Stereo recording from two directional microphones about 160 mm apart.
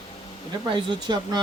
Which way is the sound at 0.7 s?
30° right (ahead or behind).